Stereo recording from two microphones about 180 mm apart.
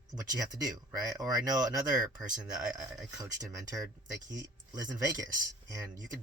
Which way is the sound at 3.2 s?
20° right (ahead or behind).